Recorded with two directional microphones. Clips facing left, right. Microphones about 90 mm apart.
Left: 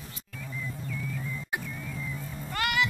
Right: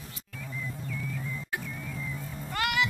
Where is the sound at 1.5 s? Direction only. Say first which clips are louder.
Left 2 dB; 15° left (ahead or behind).